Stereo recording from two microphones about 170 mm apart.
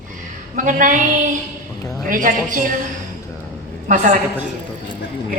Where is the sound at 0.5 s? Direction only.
50° right (ahead or behind).